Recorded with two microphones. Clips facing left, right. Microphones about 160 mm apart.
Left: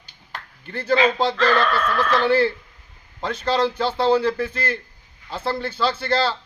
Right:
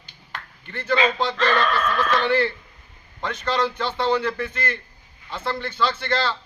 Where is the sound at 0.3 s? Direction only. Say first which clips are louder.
Left 3 dB; 35° left (ahead or behind).